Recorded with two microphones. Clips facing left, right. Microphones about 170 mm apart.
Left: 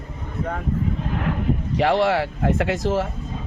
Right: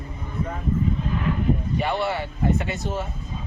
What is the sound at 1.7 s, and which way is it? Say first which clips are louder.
Speech: left 6 dB; 90° left.